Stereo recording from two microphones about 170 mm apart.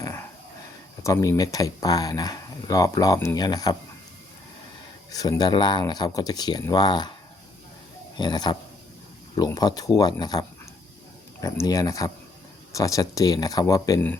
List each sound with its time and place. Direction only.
0.0 s dog: 15° left (ahead or behind)
1.0 s speech: 20° left (ahead or behind)
5.1 s speech: 20° left (ahead or behind)
8.1 s speech: 25° left (ahead or behind)